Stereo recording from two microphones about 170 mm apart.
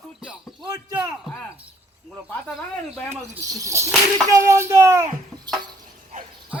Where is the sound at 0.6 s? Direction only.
20° right (ahead or behind).